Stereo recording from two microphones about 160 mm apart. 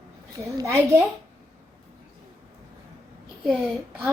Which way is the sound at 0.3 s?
20° right (ahead or behind).